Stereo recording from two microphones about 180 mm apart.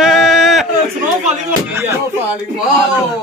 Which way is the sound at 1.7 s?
15° right (ahead or behind).